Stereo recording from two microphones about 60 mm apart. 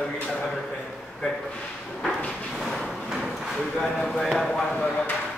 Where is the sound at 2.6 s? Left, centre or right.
Centre.